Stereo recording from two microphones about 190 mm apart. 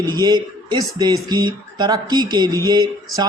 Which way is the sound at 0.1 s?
20° right (ahead or behind).